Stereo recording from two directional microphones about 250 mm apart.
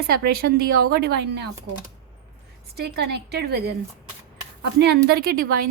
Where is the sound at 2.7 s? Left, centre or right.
Right.